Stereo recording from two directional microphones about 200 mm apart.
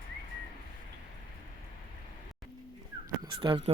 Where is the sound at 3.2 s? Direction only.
20° right (ahead or behind).